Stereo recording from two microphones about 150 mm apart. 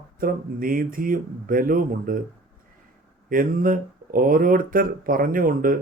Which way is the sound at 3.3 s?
70° right (ahead or behind).